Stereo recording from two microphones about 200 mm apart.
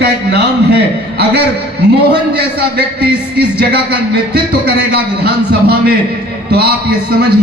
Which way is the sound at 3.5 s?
55° right (ahead or behind).